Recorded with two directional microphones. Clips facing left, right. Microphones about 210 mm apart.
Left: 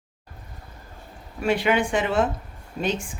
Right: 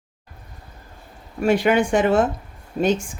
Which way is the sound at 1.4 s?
45° right (ahead or behind).